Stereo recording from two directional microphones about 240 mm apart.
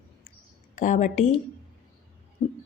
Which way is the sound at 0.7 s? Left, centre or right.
Left.